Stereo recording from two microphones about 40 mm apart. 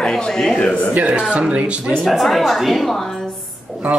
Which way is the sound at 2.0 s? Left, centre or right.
Centre.